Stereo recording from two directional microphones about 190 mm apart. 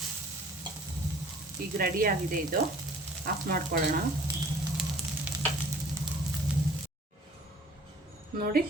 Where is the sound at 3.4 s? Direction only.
50° right (ahead or behind).